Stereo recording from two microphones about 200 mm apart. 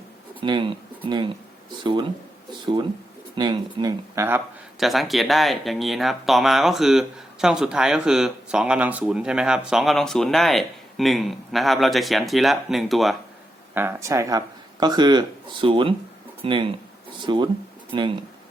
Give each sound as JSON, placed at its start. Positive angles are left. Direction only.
{"t": 0.3, "sound": "speech", "side_deg": -25}
{"t": 4.8, "sound": "speech", "side_deg": 0}
{"t": 13.7, "sound": "speech", "side_deg": -15}